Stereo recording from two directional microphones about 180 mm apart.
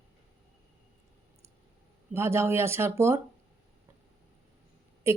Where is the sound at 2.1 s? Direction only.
15° right (ahead or behind).